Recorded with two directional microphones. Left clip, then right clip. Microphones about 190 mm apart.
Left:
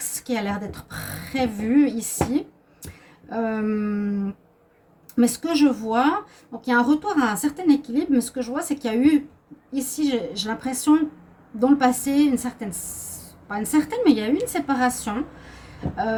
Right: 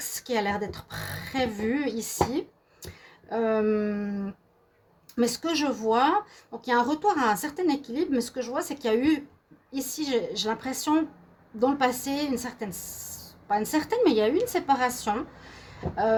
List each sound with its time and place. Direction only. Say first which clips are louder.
0.3 s a woman's voice: even; 45° right (ahead or behind)
2.8 s a sound: left 1 dB; 45° right (ahead or behind)
5.1 s a woman's voice: left 4 dB; 45° right (ahead or behind)